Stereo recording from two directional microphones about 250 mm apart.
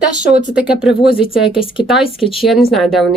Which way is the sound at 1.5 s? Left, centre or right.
Left.